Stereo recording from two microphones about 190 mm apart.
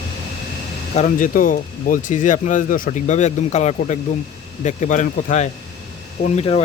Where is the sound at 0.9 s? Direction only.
45° left (ahead or behind).